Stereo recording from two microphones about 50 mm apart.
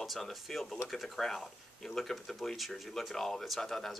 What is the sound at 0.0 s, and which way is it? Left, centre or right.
Speech, centre.